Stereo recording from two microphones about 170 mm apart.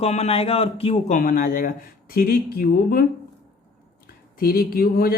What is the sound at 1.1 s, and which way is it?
Speech, 55° left (ahead or behind).